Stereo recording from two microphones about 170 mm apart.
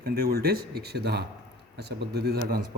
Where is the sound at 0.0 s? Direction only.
60° right (ahead or behind).